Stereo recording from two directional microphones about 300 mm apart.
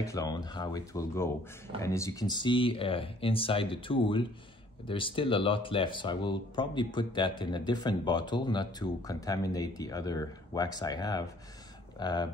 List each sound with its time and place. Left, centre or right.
0.0 s speech: centre